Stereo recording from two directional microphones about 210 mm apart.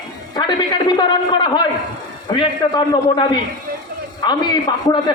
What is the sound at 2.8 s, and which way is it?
A man's voice, 20° left (ahead or behind).